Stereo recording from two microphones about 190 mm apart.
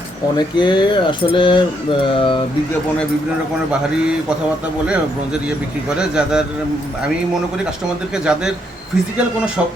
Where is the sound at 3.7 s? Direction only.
5° right (ahead or behind).